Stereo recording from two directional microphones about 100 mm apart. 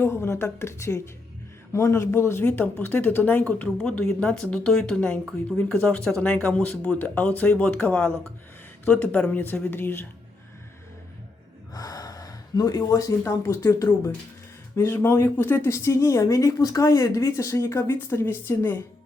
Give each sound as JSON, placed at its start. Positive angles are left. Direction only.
{"t": 0.0, "sound": "speech", "side_deg": 25}
{"t": 11.7, "sound": "speech", "side_deg": 40}